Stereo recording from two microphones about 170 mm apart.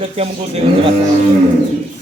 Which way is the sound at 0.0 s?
35° right (ahead or behind).